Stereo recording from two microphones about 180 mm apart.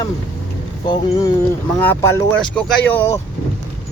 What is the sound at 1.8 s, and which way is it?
A man's voice, 10° left (ahead or behind).